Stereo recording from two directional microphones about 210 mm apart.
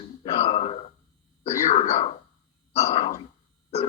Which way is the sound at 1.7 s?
30° left (ahead or behind).